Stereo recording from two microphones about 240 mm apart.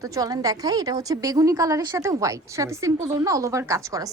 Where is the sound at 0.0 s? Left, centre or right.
Centre.